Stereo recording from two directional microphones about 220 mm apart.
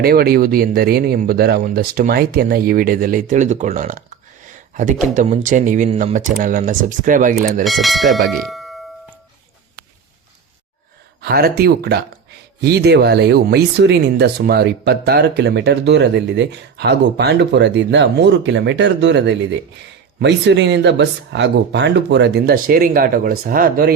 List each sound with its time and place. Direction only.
0.0 s speech: 45° right (ahead or behind)
7.6 s speech: centre (ahead or behind)
8.3 s doorbell: centre (ahead or behind)
11.2 s speech: 45° right (ahead or behind)